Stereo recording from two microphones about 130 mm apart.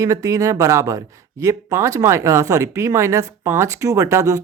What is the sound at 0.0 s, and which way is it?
Speech, 25° right (ahead or behind).